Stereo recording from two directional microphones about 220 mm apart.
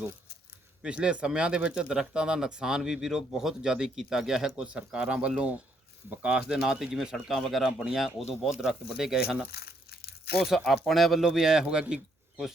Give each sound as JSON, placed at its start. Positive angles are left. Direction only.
{"t": 0.8, "sound": "speech", "side_deg": -5}
{"t": 9.5, "sound": "crumpling", "side_deg": 45}
{"t": 10.4, "sound": "speech", "side_deg": 0}